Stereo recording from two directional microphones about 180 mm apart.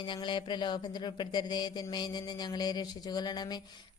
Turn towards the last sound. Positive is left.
turn(degrees=25)  # may be behind; listen again after turning